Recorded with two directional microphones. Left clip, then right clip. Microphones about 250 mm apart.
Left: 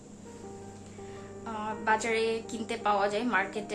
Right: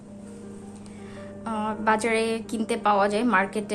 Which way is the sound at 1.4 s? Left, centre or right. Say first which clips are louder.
Right 5 dB; right.